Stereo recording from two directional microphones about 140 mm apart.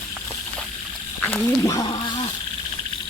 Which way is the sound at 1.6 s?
25° left (ahead or behind).